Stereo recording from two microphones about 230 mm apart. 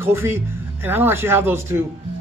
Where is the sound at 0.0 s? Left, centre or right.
Centre.